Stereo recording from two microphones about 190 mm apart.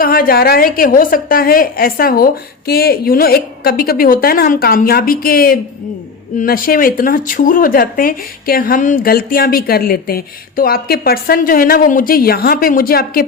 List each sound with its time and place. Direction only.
0.0 s speech: 50° left (ahead or behind)